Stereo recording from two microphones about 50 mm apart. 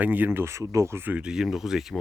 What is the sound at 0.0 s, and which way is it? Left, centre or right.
Speech, right.